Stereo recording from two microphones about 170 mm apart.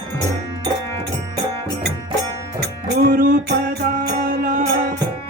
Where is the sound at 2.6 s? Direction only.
65° right (ahead or behind).